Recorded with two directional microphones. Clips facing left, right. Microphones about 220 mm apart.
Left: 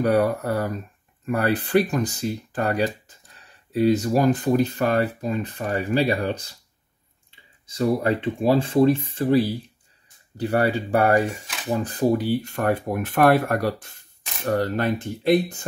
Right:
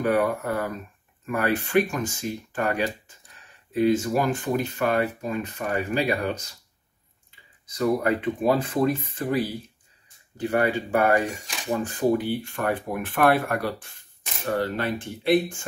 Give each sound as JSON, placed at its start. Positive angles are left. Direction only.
{"t": 0.0, "sound": "speech", "side_deg": 40}